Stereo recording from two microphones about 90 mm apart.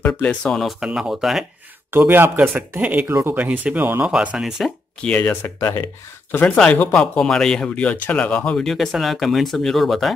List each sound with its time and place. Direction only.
0.0 s speech: 15° left (ahead or behind)
0.6 s speech: centre (ahead or behind)
1.9 s speech: 25° right (ahead or behind)
4.1 s speech: 10° right (ahead or behind)
5.0 s speech: 10° left (ahead or behind)
5.3 s speech: 25° left (ahead or behind)
6.4 s speech: 15° left (ahead or behind)